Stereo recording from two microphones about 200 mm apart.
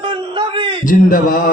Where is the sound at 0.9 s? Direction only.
40° left (ahead or behind).